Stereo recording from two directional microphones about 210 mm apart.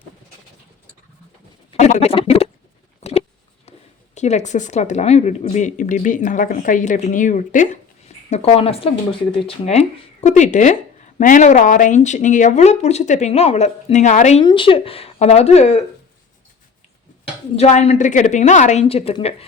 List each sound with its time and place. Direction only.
1.8 s a sound: 30° left (ahead or behind)
3.7 s speech: 35° left (ahead or behind)
14.4 s speech: 25° left (ahead or behind)
17.6 s speech: 30° left (ahead or behind)